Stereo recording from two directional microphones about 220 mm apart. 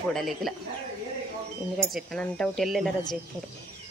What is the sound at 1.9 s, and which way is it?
Speech, 5° left (ahead or behind).